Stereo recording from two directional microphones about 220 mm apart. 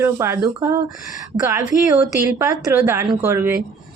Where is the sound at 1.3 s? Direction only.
30° right (ahead or behind).